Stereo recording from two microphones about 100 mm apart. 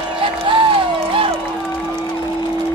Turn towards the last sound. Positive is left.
turn(degrees=-65)  # may be behind; listen again after turning